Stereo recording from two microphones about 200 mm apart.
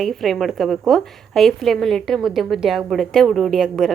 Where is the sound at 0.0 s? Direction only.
Centre (ahead or behind).